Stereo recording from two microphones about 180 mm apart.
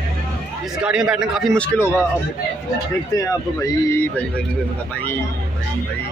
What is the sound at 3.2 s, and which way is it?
Speech, 15° left (ahead or behind).